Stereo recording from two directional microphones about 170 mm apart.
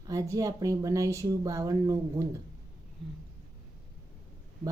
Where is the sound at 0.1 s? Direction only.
20° right (ahead or behind).